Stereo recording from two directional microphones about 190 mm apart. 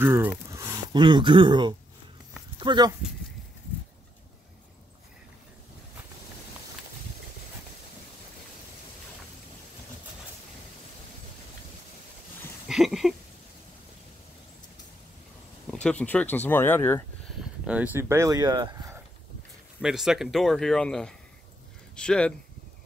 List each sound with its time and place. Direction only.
0.0 s speech: 10° right (ahead or behind)
12.6 s a sound: centre (ahead or behind)
15.6 s speech: 5° left (ahead or behind)
17.6 s speech: 10° right (ahead or behind)
19.8 s speech: centre (ahead or behind)